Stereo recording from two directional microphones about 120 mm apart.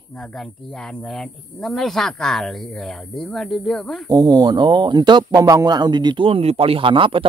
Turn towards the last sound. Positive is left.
turn(degrees=-45)  # may be behind; listen again after turning